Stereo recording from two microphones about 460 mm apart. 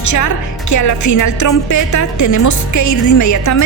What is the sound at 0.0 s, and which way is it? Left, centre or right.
A woman's voice, left.